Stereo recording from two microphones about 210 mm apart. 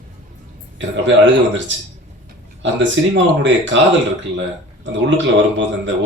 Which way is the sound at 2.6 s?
60° right (ahead or behind).